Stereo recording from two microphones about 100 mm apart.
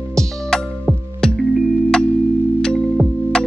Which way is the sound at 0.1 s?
5° left (ahead or behind).